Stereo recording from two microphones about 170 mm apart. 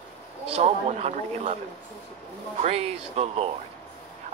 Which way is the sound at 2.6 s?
40° right (ahead or behind).